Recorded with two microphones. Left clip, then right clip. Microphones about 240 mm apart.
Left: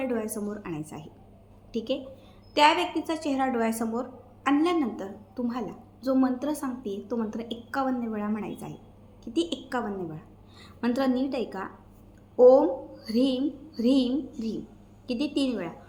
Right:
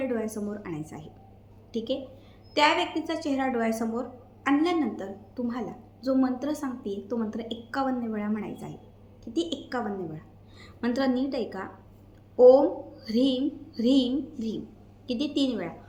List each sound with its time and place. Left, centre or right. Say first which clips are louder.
0.0 s a woman's voice: even; centre